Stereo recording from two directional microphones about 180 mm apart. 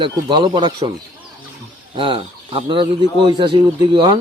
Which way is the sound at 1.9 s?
30° right (ahead or behind).